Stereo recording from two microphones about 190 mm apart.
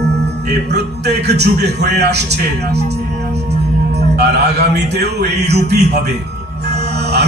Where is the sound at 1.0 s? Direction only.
60° right (ahead or behind).